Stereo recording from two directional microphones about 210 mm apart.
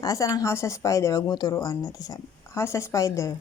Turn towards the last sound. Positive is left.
turn(degrees=15)  # may be behind; listen again after turning